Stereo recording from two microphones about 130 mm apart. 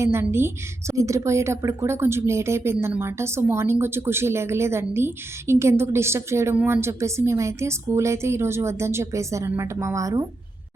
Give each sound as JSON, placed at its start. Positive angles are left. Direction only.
{"t": 0.0, "sound": "speech", "side_deg": -20}